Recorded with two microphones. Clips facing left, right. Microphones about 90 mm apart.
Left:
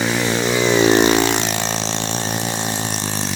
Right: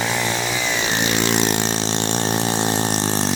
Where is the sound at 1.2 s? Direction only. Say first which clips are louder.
Even; centre (ahead or behind).